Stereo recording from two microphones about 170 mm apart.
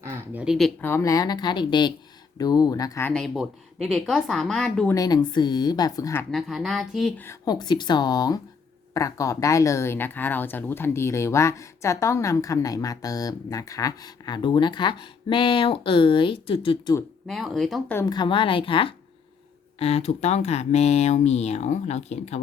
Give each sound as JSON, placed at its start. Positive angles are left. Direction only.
{"t": 0.0, "sound": "speech", "side_deg": -15}
{"t": 0.4, "sound": "speech", "side_deg": 0}
{"t": 0.8, "sound": "speech", "side_deg": 15}
{"t": 3.1, "sound": "speech", "side_deg": 0}
{"t": 4.9, "sound": "speech", "side_deg": 20}
{"t": 6.3, "sound": "speech", "side_deg": 0}
{"t": 7.2, "sound": "speech", "side_deg": 20}
{"t": 17.2, "sound": "speech", "side_deg": 0}
{"t": 17.9, "sound": "speech", "side_deg": 25}